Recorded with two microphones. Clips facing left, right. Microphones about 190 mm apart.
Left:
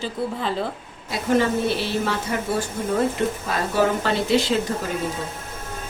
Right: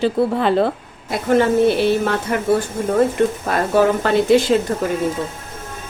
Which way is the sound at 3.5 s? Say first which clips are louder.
Right 5 dB; 55° right (ahead or behind).